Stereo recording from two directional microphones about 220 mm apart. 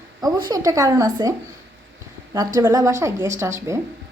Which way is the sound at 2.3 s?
15° right (ahead or behind).